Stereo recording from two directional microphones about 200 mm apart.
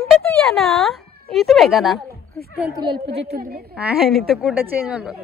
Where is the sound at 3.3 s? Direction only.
50° right (ahead or behind).